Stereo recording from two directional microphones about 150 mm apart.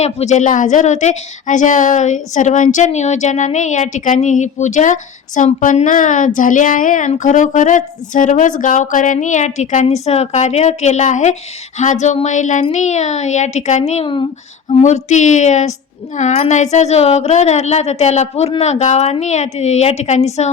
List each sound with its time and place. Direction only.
0.0 s speech: 50° left (ahead or behind)
14.7 s speech: 50° left (ahead or behind)